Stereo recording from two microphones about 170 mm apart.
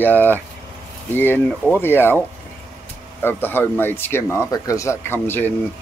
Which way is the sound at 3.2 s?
10° left (ahead or behind).